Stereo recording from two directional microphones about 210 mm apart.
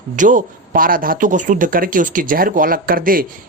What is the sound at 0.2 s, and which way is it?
Speech, 40° right (ahead or behind).